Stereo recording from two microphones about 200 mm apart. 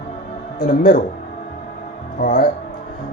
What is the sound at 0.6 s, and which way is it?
Speech, 40° left (ahead or behind).